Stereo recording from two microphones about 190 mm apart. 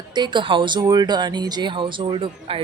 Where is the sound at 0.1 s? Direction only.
25° right (ahead or behind).